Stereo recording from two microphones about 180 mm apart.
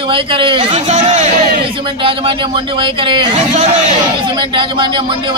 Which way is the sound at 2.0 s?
30° right (ahead or behind).